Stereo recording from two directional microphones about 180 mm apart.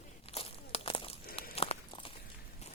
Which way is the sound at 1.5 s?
35° left (ahead or behind).